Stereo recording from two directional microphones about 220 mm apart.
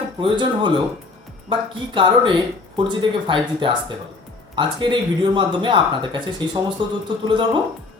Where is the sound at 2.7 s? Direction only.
20° right (ahead or behind).